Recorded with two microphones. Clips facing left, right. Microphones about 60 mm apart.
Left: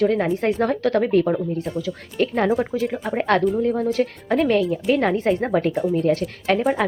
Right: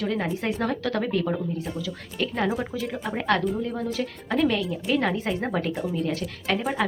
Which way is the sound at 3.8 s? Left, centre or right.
Left.